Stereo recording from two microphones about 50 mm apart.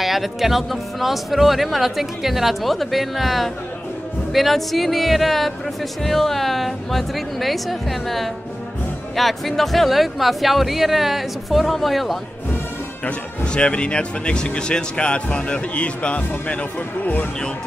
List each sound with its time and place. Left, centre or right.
0.0 s speech: centre
13.0 s speech: left